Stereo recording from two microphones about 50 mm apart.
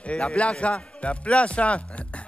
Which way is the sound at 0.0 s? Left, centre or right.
Left.